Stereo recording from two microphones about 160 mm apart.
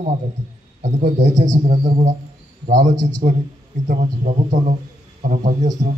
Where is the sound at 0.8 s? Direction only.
50° right (ahead or behind).